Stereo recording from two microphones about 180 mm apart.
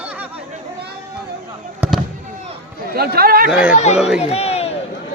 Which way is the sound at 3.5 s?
5° right (ahead or behind).